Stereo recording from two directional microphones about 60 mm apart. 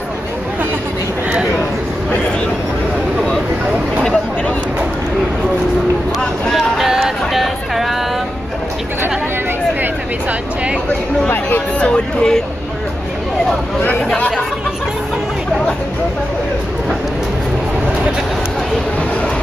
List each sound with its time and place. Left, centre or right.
6.5 s a sound: centre
11.8 s music: centre
13.8 s chatter: left